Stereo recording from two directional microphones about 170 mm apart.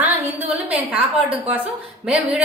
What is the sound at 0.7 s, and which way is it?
A woman's voice, 10° right (ahead or behind).